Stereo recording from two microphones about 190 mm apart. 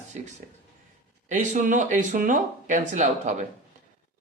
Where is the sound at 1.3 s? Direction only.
40° right (ahead or behind).